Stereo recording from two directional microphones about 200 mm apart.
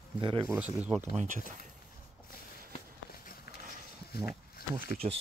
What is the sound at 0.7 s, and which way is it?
Speech, 5° right (ahead or behind).